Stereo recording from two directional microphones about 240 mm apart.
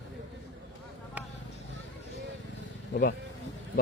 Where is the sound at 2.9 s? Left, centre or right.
Left.